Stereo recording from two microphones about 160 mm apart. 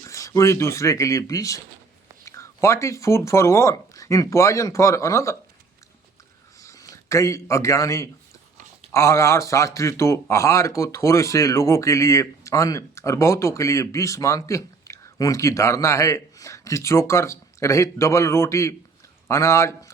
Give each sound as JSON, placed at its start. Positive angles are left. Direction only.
{"t": 0.0, "sound": "speech", "side_deg": 20}
{"t": 6.6, "sound": "speech", "side_deg": 20}